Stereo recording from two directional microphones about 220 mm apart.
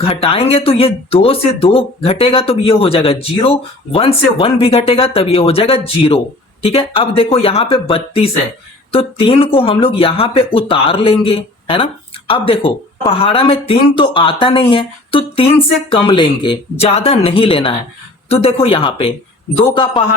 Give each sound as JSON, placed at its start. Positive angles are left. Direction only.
{"t": 0.0, "sound": "speech", "side_deg": 25}